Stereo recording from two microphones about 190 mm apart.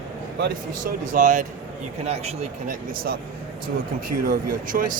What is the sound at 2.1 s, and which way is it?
Speech, 35° right (ahead or behind).